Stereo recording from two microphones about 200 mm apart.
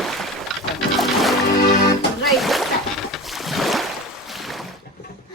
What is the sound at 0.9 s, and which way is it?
Music, centre (ahead or behind).